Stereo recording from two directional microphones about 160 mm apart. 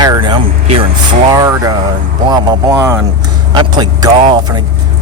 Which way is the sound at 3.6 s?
25° right (ahead or behind).